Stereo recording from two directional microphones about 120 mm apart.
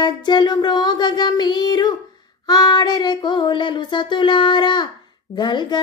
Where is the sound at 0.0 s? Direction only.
35° left (ahead or behind).